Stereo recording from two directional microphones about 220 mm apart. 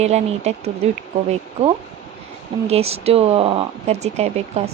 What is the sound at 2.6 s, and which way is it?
Speech, 30° right (ahead or behind).